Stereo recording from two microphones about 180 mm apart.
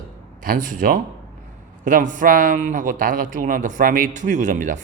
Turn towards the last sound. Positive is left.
turn(degrees=-45)  # may be behind; listen again after turning